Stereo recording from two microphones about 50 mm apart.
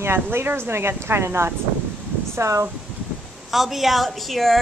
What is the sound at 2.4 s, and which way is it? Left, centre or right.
Speech, right.